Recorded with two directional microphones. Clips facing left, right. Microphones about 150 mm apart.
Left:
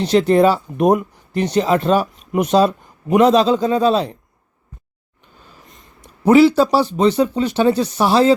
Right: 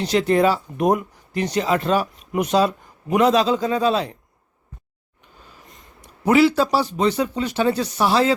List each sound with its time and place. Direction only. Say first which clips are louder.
0.0 s speech: left 4 dB; 30° left (ahead or behind)
6.0 s speech: left 5 dB; 25° left (ahead or behind)